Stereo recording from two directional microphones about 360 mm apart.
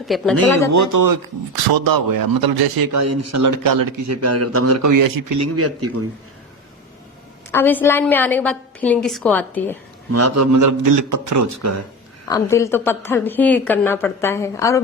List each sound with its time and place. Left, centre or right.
0.0 s a woman's voice: centre
0.7 s a man's voice: right
2.9 s speech: right
5.4 s speech: right
7.5 s a woman's voice: centre
10.1 s speech: right
12.3 s a woman's voice: centre